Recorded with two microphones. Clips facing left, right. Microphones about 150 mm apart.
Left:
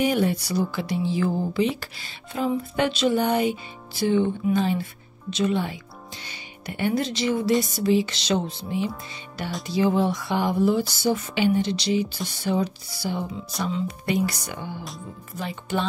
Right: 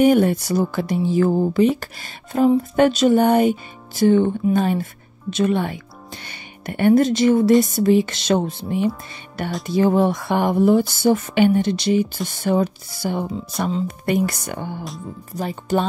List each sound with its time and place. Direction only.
0.0 s speech: 50° right (ahead or behind)
13.7 s speech: 35° right (ahead or behind)
14.0 s speech: 50° right (ahead or behind)
15.3 s speech: 40° right (ahead or behind)